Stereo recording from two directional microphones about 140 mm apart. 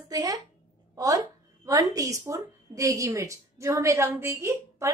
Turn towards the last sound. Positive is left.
turn(degrees=-20)  # may be behind; listen again after turning